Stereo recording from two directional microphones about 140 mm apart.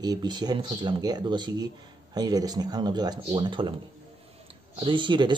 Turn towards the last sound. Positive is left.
turn(degrees=-35)  # may be behind; listen again after turning